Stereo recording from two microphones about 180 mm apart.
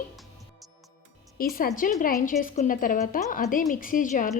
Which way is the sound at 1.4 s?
55° left (ahead or behind).